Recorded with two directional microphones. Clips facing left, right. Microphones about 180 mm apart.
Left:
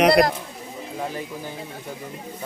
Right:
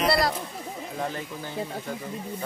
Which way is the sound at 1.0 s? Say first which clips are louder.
Left 2 dB; 10° left (ahead or behind).